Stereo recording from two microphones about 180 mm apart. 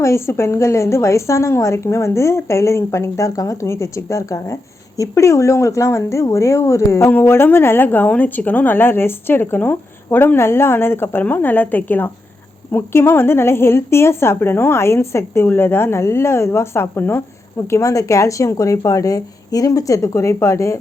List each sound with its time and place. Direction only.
0.0 s speech: 15° left (ahead or behind)